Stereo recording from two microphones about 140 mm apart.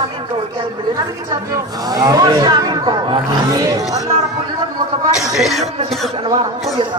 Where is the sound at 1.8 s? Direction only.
25° right (ahead or behind).